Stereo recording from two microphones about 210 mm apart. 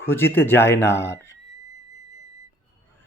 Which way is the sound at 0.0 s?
10° left (ahead or behind).